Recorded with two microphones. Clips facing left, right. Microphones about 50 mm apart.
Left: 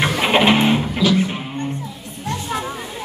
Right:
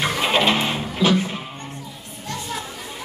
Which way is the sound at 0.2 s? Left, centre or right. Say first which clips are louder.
Left 5 dB; left.